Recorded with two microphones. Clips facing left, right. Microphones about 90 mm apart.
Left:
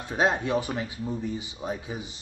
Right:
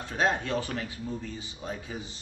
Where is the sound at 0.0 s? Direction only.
20° left (ahead or behind).